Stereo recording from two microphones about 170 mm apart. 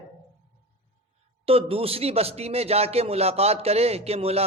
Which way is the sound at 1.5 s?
35° right (ahead or behind).